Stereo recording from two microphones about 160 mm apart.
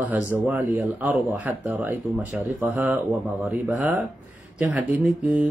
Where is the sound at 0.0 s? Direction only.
10° right (ahead or behind).